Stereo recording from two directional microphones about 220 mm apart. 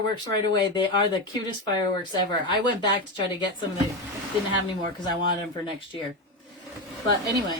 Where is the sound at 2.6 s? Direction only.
20° left (ahead or behind).